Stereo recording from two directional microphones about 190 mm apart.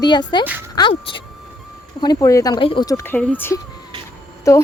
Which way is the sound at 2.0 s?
15° left (ahead or behind).